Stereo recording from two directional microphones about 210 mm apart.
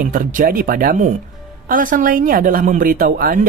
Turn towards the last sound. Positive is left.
turn(degrees=-45)  # may be behind; listen again after turning